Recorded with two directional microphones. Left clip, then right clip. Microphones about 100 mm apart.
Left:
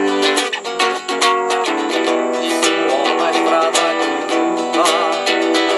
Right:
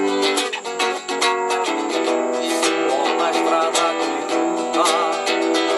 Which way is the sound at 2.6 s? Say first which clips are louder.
Left 4 dB; 15° left (ahead or behind).